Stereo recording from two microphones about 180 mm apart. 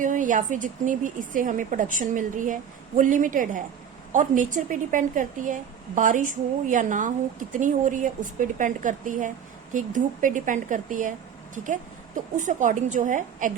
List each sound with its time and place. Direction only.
0.0 s speech: 45° right (ahead or behind)